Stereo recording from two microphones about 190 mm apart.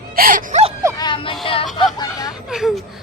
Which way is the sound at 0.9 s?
25° left (ahead or behind).